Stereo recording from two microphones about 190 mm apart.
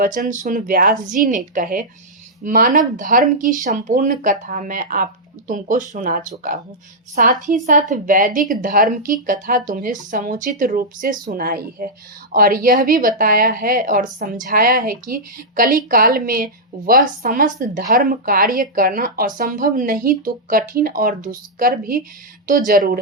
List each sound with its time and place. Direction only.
0.0 s speech: 45° right (ahead or behind)